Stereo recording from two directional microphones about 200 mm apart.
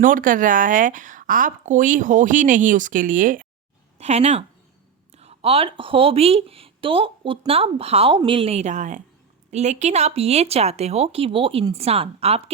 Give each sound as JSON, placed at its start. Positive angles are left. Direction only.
{"t": 0.0, "sound": "speech", "side_deg": -40}